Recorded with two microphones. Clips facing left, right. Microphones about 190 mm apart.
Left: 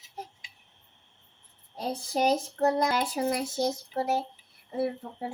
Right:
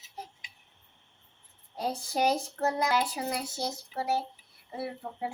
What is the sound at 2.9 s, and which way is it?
Speech, 50° left (ahead or behind).